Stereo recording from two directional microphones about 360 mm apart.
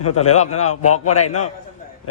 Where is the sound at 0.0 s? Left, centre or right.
Left.